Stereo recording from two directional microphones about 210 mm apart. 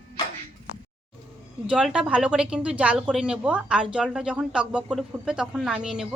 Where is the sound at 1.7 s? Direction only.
5° right (ahead or behind).